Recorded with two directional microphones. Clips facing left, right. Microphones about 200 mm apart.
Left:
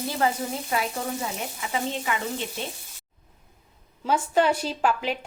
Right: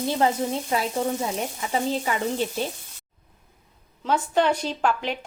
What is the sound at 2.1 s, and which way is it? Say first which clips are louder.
Frying: right 2 dB; 35° right (ahead or behind).